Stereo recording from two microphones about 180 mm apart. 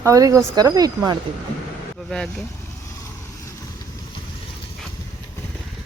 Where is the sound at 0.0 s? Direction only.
20° right (ahead or behind).